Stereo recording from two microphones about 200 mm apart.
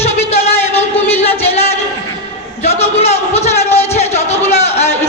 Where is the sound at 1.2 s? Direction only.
30° left (ahead or behind).